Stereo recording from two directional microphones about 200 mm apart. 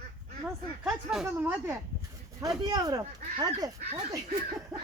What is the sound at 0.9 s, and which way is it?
Speech, 5° right (ahead or behind).